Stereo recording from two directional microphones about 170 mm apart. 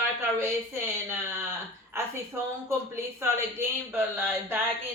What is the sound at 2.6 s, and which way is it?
Speech, 15° right (ahead or behind).